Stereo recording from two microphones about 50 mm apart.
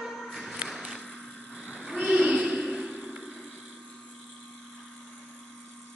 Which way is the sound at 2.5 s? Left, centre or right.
Centre.